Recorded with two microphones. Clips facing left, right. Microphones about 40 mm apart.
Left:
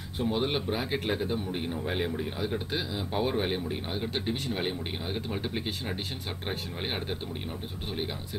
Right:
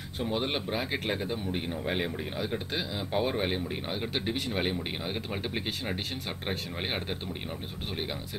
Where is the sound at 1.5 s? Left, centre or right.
Centre.